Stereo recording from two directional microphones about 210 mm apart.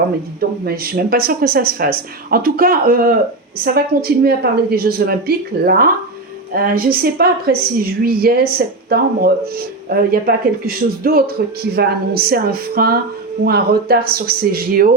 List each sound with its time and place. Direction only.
0.3 s a woman's voice: 45° right (ahead or behind)